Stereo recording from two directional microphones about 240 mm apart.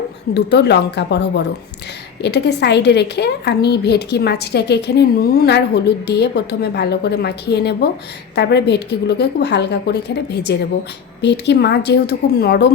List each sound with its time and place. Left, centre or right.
0.3 s a woman's voice: left